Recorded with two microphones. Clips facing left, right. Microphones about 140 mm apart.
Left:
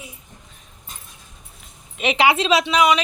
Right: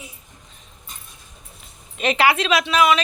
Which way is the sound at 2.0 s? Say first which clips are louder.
Left 1 dB; 15° left (ahead or behind).